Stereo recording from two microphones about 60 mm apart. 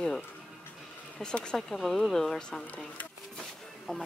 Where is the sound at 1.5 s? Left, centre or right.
Centre.